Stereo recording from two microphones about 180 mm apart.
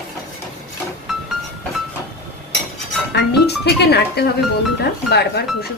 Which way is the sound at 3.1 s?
65° left (ahead or behind).